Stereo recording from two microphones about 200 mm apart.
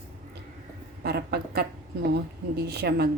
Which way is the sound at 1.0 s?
55° right (ahead or behind).